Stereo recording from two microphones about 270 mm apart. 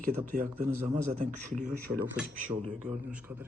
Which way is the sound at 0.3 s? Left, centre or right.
Right.